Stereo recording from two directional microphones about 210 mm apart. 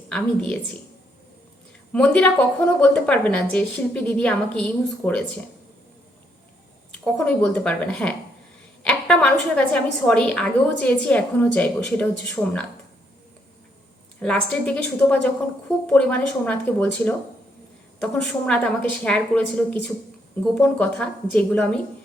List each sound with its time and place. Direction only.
0.1 s a woman's voice: 5° left (ahead or behind)
1.9 s a woman's voice: 5° left (ahead or behind)
6.9 s a woman's voice: 5° left (ahead or behind)
14.2 s a woman's voice: 5° left (ahead or behind)